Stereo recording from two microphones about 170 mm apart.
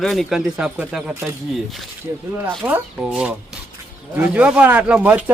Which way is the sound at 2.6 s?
5° right (ahead or behind).